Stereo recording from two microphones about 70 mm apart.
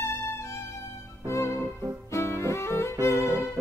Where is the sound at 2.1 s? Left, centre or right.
Left.